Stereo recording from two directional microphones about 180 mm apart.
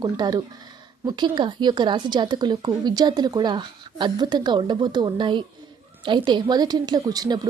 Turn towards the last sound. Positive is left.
turn(degrees=-20)  # may be behind; listen again after turning